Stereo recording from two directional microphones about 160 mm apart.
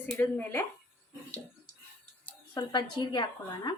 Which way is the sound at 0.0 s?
10° left (ahead or behind).